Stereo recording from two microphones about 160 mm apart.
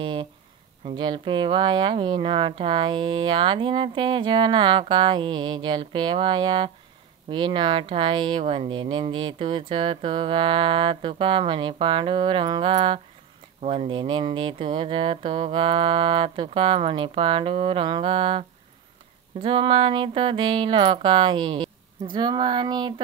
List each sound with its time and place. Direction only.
0.0 s a sound: 30° right (ahead or behind)
0.8 s speech: 30° right (ahead or behind)
19.4 s speech: 35° right (ahead or behind)